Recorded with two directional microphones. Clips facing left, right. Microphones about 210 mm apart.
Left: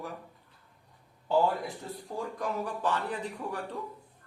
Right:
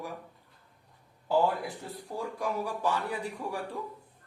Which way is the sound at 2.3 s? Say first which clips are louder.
Right 2 dB; 10° right (ahead or behind).